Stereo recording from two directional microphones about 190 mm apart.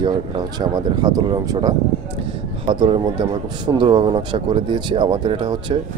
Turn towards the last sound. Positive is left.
turn(degrees=-25)  # may be behind; listen again after turning